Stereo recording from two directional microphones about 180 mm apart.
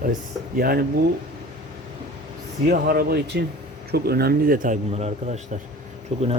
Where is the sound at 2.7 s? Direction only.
55° right (ahead or behind); by 6.3 s 35° right (ahead or behind).